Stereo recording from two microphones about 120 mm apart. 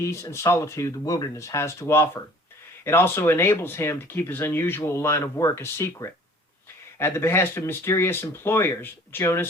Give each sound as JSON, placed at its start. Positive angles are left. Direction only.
{"t": 0.0, "sound": "speech", "side_deg": 25}